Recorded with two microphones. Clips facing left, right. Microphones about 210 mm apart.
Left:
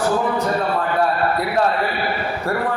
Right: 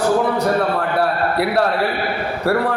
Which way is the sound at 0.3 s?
70° right (ahead or behind).